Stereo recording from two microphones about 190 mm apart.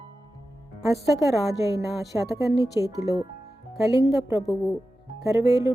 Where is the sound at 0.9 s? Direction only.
15° right (ahead or behind).